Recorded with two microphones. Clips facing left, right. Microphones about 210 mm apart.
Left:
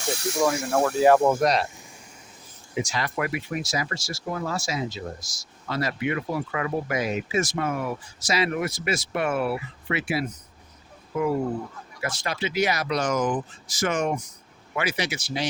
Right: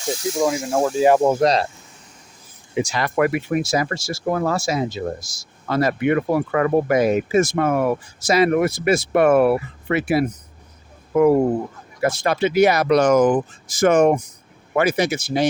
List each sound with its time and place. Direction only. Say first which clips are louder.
0.1 s speech: right 3 dB; 65° left (ahead or behind)
1.0 s speech: right 3 dB; 20° right (ahead or behind)
2.7 s speech: right 7 dB; 60° right (ahead or behind)